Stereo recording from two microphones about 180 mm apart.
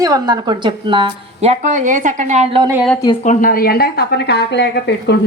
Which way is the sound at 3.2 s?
45° left (ahead or behind).